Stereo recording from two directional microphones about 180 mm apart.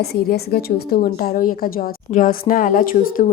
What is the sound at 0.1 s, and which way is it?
A woman's voice, 60° left (ahead or behind).